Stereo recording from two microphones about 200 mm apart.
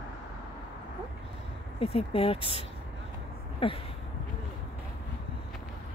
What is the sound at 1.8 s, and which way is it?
Speech, 30° left (ahead or behind).